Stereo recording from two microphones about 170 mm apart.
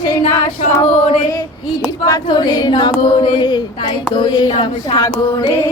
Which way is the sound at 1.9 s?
25° left (ahead or behind).